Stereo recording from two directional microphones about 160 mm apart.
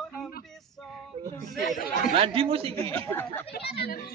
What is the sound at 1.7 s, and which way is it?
Chatter, 65° left (ahead or behind).